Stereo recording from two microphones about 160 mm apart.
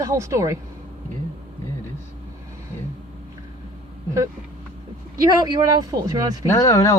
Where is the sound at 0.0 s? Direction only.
20° right (ahead or behind).